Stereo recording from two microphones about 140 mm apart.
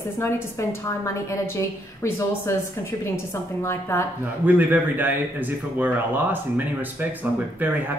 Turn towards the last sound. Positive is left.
turn(degrees=-15)  # may be behind; listen again after turning